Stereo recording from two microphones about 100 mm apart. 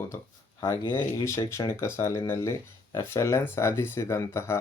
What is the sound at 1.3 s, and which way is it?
Speech, 30° left (ahead or behind).